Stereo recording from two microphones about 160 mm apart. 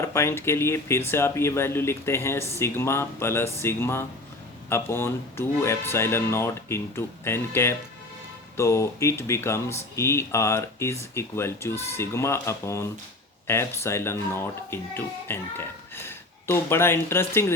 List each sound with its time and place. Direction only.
0.0 s speech: 15° left (ahead or behind)